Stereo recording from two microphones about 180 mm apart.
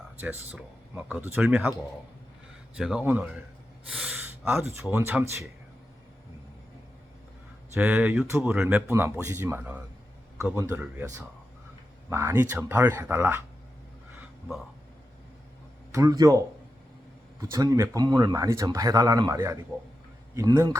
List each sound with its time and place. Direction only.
0.5 s speech: 10° right (ahead or behind)
2.7 s speech: 5° right (ahead or behind)
7.7 s speech: 10° right (ahead or behind)
15.9 s speech: 20° right (ahead or behind)
17.5 s speech: 20° right (ahead or behind)